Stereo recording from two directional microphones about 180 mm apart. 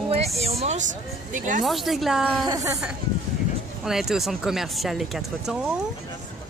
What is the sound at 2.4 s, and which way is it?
Speech, 20° right (ahead or behind).